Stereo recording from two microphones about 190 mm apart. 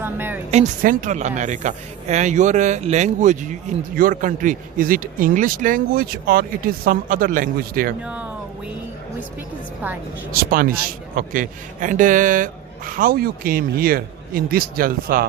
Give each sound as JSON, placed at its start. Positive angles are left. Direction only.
{"t": 0.0, "sound": "speech", "side_deg": -10}
{"t": 0.5, "sound": "a man's voice", "side_deg": -40}
{"t": 8.0, "sound": "speech", "side_deg": -5}
{"t": 10.3, "sound": "a man's voice", "side_deg": -50}